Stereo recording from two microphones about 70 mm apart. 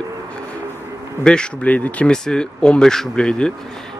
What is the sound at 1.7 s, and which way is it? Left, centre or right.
Speech, left.